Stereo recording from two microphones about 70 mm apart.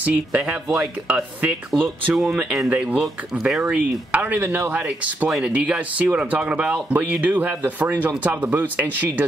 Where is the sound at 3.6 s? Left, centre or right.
Centre.